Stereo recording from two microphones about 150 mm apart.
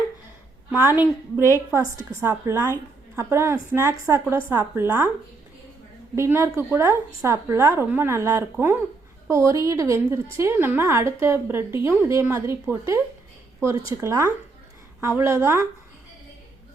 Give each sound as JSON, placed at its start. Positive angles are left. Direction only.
{"t": 0.7, "sound": "a woman's voice", "side_deg": -10}
{"t": 6.1, "sound": "a woman's voice", "side_deg": -15}